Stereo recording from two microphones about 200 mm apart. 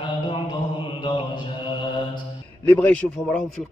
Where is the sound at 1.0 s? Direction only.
25° left (ahead or behind).